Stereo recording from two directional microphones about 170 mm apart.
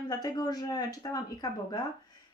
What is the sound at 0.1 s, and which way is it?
Speech, 20° left (ahead or behind).